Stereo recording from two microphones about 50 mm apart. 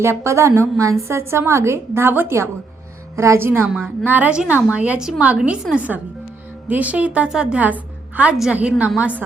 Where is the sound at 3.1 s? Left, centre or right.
Right.